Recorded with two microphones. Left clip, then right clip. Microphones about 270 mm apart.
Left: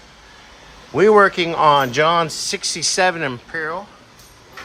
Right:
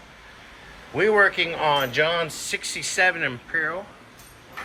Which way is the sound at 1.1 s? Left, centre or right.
Left.